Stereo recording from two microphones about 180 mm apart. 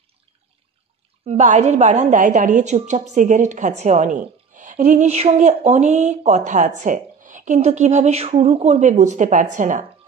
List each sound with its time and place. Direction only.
1.2 s a woman's voice: 40° right (ahead or behind)